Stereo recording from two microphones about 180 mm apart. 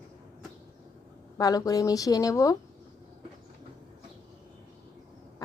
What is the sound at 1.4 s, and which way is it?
Speech, 20° left (ahead or behind).